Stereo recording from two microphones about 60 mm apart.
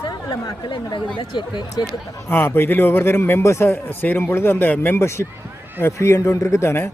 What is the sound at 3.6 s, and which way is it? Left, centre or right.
A man's voice, left.